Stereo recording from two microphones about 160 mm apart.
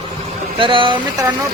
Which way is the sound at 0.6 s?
30° right (ahead or behind).